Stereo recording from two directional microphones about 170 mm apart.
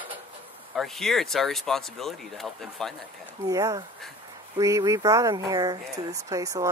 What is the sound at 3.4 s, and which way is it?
Speech, 20° right (ahead or behind).